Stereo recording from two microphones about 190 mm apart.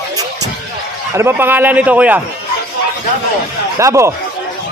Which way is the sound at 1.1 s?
10° right (ahead or behind).